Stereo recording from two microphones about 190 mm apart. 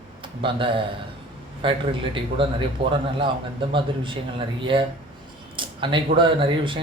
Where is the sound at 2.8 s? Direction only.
25° right (ahead or behind).